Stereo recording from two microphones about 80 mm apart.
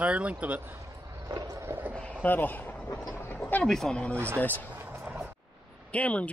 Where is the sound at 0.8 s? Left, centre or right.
Right.